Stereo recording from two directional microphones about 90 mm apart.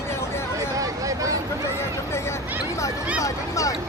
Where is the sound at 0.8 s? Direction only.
40° right (ahead or behind).